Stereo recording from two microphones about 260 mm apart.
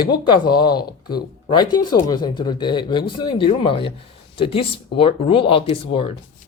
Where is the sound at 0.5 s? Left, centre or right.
Left.